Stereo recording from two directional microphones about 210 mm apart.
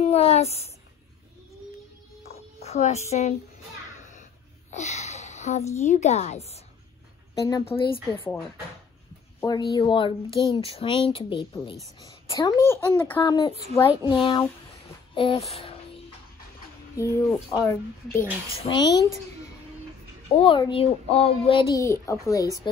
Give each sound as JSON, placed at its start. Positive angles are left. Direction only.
{"t": 0.0, "sound": "a sound", "side_deg": 30}
{"t": 2.6, "sound": "speech", "side_deg": 30}
{"t": 4.6, "sound": "a sound", "side_deg": 35}
{"t": 5.8, "sound": "a woman's voice", "side_deg": 35}
{"t": 7.3, "sound": "speech", "side_deg": 15}
{"t": 7.6, "sound": "a child's voice", "side_deg": 25}
{"t": 9.4, "sound": "a child's voice", "side_deg": 15}
{"t": 13.2, "sound": "a child's voice", "side_deg": 20}
{"t": 16.9, "sound": "a child's voice", "side_deg": 15}
{"t": 20.3, "sound": "a child's voice", "side_deg": 25}